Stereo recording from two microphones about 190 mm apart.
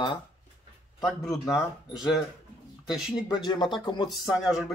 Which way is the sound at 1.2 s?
15° left (ahead or behind).